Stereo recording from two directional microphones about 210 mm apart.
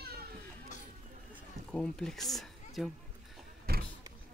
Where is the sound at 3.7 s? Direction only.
45° right (ahead or behind).